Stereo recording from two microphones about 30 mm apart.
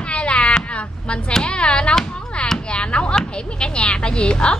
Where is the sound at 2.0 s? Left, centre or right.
Centre.